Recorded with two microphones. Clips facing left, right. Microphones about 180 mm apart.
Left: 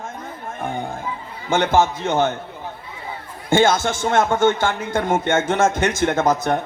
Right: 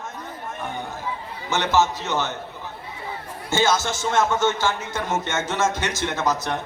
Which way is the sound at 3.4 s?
55° left (ahead or behind).